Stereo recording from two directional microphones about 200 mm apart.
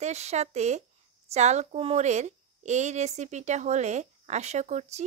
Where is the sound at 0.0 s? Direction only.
35° right (ahead or behind).